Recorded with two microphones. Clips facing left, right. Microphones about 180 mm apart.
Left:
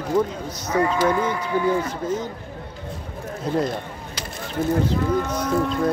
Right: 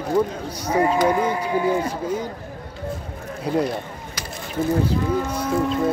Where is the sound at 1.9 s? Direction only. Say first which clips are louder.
Right 1 dB; 10° right (ahead or behind).